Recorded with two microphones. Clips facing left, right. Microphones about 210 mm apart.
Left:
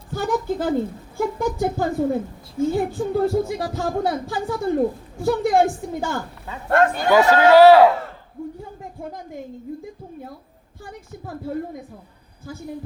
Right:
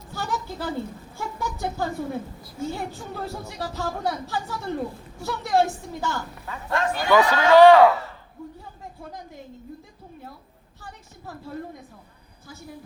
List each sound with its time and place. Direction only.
0.1 s speech: 50° left (ahead or behind)
7.3 s speech: 5° left (ahead or behind)